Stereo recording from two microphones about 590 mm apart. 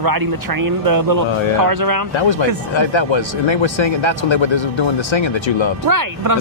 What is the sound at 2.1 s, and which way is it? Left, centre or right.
Speech, left.